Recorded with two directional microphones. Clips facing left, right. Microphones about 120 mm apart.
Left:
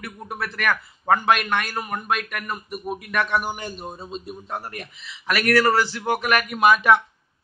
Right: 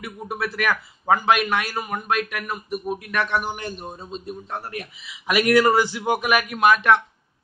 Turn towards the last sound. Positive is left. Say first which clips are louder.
# even
turn(degrees=5)  # may be behind; listen again after turning